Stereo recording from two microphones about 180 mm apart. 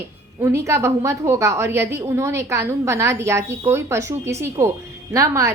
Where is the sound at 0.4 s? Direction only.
15° right (ahead or behind).